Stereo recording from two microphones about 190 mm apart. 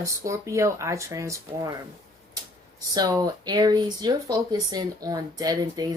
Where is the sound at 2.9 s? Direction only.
20° right (ahead or behind).